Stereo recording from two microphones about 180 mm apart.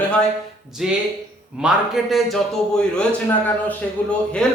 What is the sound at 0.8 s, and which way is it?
A man's voice, centre (ahead or behind).